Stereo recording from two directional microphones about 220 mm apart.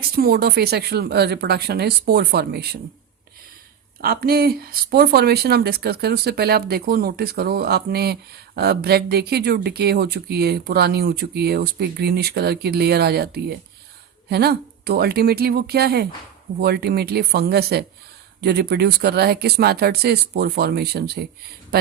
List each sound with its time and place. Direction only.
0.0 s speech: 45° right (ahead or behind)
4.0 s speech: 45° right (ahead or behind)